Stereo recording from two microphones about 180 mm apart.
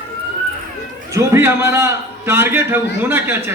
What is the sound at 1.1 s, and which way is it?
A man's voice, 15° right (ahead or behind).